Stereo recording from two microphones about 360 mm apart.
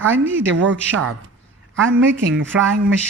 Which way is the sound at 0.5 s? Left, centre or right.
Right.